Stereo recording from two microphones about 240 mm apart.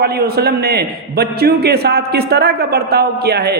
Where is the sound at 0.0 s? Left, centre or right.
Right.